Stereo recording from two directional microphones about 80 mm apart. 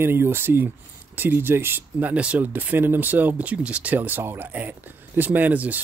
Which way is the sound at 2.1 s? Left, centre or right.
Centre.